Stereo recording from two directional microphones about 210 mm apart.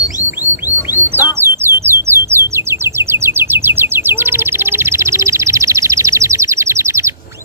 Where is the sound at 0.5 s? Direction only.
10° right (ahead or behind).